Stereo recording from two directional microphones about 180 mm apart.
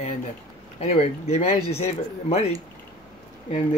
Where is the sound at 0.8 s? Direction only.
35° left (ahead or behind).